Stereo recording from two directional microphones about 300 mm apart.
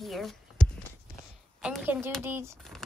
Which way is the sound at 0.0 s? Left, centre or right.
Centre.